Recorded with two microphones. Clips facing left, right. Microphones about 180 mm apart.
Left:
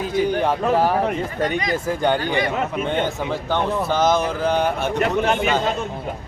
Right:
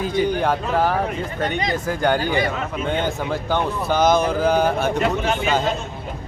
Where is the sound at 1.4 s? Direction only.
25° right (ahead or behind).